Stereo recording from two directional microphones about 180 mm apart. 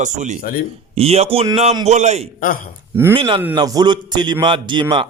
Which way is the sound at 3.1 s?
30° right (ahead or behind).